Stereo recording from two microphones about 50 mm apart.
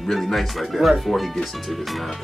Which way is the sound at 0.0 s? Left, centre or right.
Centre.